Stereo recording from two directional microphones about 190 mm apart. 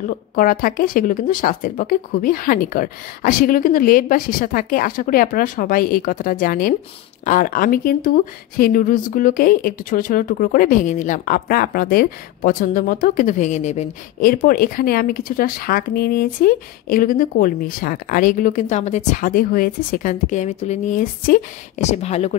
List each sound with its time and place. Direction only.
0.1 s speech: 45° left (ahead or behind)